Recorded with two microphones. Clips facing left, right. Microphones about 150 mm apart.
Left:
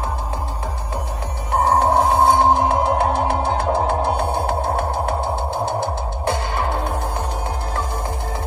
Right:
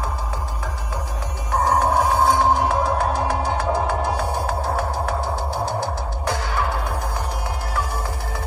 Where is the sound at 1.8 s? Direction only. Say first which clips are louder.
Left 3 dB; 25° left (ahead or behind).